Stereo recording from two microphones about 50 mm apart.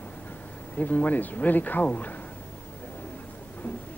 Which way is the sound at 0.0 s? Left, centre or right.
Left.